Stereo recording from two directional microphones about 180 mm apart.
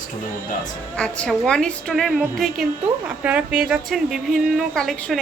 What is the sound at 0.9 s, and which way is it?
A woman's voice, 5° left (ahead or behind).